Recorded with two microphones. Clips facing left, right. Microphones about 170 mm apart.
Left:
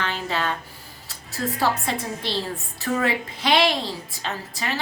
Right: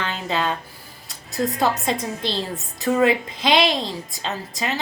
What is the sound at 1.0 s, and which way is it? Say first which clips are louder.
A woman's voice: right 4 dB; 15° right (ahead or behind).